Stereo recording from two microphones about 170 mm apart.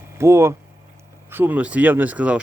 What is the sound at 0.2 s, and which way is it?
Speech, 15° right (ahead or behind).